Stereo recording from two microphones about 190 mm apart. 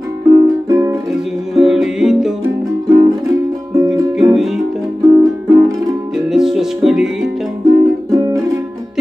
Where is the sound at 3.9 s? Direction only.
Centre (ahead or behind).